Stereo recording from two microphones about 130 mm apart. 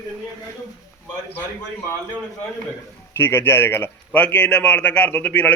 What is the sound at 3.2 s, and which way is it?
A man's voice, 20° left (ahead or behind).